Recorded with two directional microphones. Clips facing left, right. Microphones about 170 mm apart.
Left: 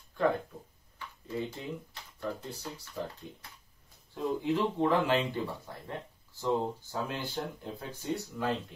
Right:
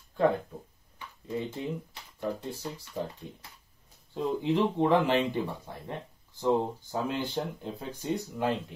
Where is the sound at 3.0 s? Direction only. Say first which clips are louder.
Right 3 dB; 30° right (ahead or behind).